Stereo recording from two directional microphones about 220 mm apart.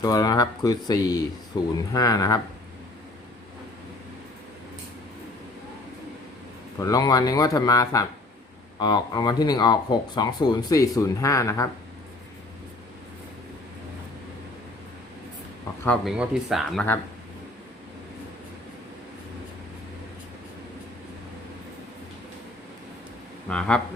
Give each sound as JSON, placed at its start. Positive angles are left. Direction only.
{"t": 0.0, "sound": "speech", "side_deg": 15}
{"t": 6.7, "sound": "speech", "side_deg": 15}
{"t": 15.8, "sound": "speech", "side_deg": 0}
{"t": 23.5, "sound": "speech", "side_deg": 5}